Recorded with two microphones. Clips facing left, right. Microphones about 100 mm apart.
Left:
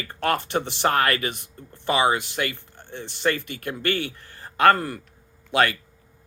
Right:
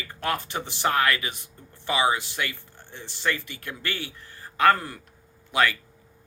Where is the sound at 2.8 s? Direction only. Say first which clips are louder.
Left 6 dB; 55° left (ahead or behind).